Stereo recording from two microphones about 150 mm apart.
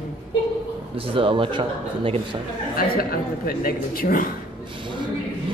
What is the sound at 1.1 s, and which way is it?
A man's voice, 35° right (ahead or behind).